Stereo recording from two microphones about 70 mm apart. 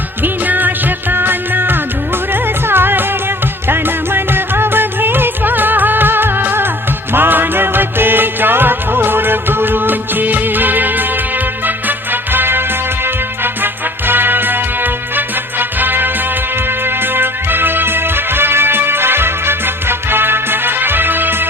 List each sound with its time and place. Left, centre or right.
0.2 s music: right